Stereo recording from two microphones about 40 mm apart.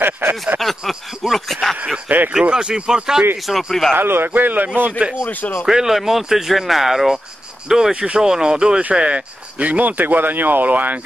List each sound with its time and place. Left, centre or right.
0.0 s a sound: right
0.6 s speech: centre
2.0 s speech: right
2.5 s speech: centre
3.5 s speech: centre
3.9 s a man's voice: right
4.3 s speech: right
5.2 s speech: left
5.7 s speech: centre
7.9 s speech: right
8.2 s speech: centre
9.6 s speech: right